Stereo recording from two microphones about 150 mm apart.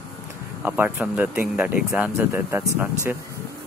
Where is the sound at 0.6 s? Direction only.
10° right (ahead or behind).